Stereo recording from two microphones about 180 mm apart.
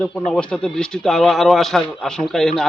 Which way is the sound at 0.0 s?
5° left (ahead or behind).